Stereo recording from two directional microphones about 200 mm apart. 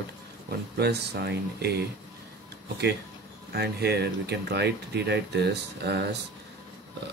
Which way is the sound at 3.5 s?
55° right (ahead or behind).